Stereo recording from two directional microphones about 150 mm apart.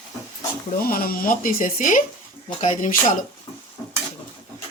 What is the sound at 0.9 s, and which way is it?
Speech, 75° left (ahead or behind).